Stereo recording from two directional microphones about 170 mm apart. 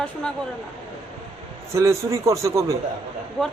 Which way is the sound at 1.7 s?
15° right (ahead or behind).